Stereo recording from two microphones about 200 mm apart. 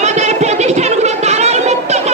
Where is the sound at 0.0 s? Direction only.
35° right (ahead or behind).